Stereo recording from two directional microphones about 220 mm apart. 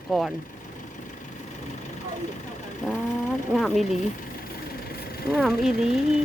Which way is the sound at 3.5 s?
Centre (ahead or behind).